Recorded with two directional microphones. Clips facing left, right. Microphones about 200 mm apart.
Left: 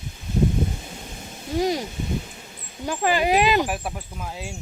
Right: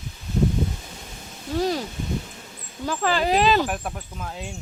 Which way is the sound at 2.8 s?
15° left (ahead or behind).